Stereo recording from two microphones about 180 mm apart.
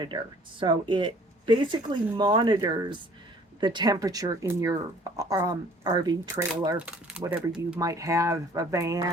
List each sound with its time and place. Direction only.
0.6 s speech: 25° right (ahead or behind)
6.7 s speech: 5° right (ahead or behind)
7.8 s speech: 20° right (ahead or behind)